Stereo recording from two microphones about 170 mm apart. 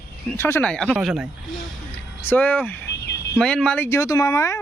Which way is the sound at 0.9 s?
5° right (ahead or behind).